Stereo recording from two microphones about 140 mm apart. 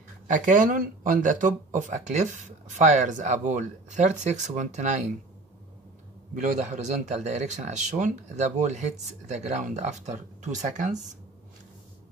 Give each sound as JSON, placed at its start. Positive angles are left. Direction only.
{"t": 0.3, "sound": "speech", "side_deg": -70}
{"t": 6.3, "sound": "speech", "side_deg": -60}